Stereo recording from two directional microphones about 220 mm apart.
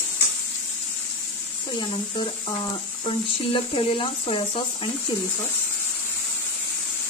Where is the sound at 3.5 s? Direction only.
25° left (ahead or behind).